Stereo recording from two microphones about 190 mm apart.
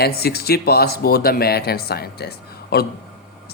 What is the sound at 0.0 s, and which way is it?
Speech, 55° left (ahead or behind).